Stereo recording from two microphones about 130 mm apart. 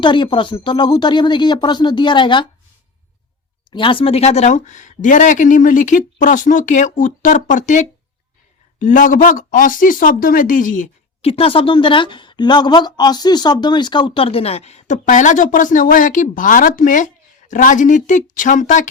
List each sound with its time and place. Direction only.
0.0 s speech: 40° left (ahead or behind)
3.7 s speech: 40° left (ahead or behind); by 7.9 s 75° left (ahead or behind)
8.8 s speech: 85° left
11.2 s a woman's voice: 45° left (ahead or behind); by 17.1 s 85° left
17.5 s speech: 75° left (ahead or behind)